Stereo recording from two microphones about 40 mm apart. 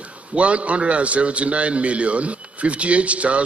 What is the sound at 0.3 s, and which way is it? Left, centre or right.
A man's voice, right.